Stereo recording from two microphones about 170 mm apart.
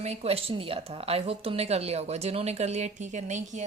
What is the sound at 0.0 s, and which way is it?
A woman's voice, 40° right (ahead or behind).